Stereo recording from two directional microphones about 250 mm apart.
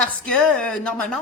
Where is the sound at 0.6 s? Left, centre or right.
Centre.